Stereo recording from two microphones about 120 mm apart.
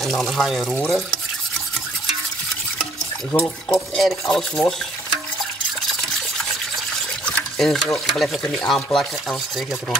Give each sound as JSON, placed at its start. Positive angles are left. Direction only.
{"t": 0.0, "sound": "speech", "side_deg": 0}
{"t": 3.4, "sound": "speech", "side_deg": 5}
{"t": 5.9, "sound": "a sound", "side_deg": 0}
{"t": 7.2, "sound": "speech", "side_deg": 5}